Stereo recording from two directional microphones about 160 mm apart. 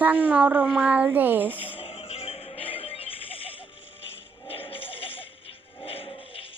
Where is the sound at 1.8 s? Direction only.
40° left (ahead or behind).